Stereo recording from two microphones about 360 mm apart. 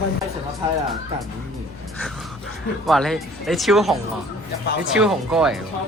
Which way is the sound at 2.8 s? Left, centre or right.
Centre.